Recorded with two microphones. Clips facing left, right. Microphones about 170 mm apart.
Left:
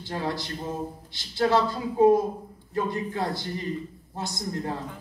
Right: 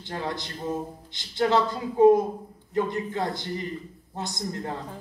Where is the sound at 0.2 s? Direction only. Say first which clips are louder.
Left 1 dB; 20° right (ahead or behind).